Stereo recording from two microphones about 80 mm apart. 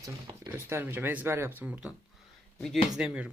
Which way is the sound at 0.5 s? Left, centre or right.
Right.